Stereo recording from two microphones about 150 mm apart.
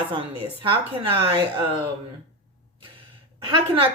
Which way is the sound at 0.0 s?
35° right (ahead or behind).